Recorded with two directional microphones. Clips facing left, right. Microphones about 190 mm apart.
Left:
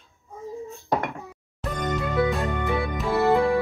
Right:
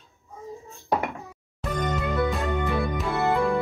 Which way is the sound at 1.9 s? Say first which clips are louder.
Left 4 dB; centre (ahead or behind).